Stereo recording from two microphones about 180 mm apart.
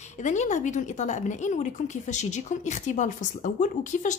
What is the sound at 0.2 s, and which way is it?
A woman's voice, 40° left (ahead or behind).